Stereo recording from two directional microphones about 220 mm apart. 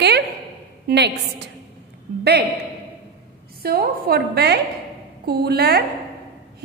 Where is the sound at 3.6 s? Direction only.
45° right (ahead or behind).